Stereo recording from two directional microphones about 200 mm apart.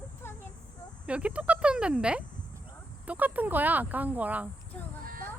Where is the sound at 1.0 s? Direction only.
5° right (ahead or behind).